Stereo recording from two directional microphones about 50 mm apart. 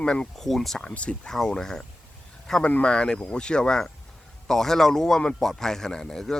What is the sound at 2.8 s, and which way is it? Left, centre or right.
Speech, centre.